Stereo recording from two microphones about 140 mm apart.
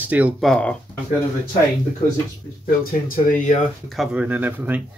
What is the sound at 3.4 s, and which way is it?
Speech, 60° left (ahead or behind).